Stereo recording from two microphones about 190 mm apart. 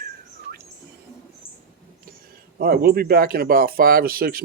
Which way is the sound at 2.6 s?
55° right (ahead or behind).